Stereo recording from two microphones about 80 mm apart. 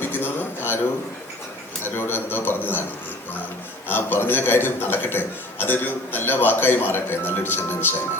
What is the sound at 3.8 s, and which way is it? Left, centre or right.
A man's voice, left.